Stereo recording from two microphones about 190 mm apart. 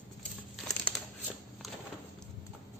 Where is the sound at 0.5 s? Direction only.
Centre (ahead or behind).